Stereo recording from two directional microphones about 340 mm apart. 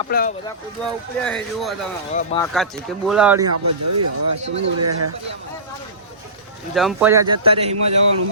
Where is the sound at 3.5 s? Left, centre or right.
Right.